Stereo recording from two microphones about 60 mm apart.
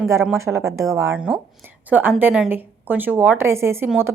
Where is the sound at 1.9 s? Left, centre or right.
Right.